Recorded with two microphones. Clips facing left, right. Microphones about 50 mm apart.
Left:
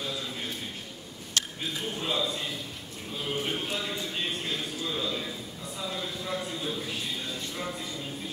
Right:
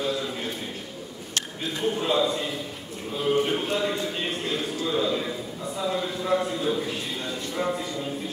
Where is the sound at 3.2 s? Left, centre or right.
Centre.